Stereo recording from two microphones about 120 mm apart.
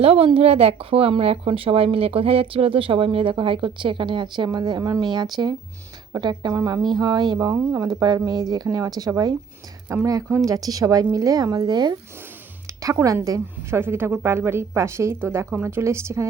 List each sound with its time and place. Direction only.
0.0 s a woman's voice: 55° right (ahead or behind); by 7.5 s 35° right (ahead or behind)
7.5 s a woman's voice: 20° right (ahead or behind)
7.9 s a woman's voice: 35° right (ahead or behind)
12.6 s a woman's voice: 25° right (ahead or behind)